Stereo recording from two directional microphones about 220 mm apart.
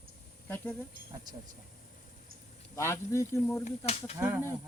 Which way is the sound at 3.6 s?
30° left (ahead or behind).